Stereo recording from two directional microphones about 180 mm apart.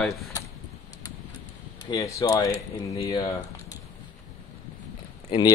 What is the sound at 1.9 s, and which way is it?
Speech, 15° left (ahead or behind).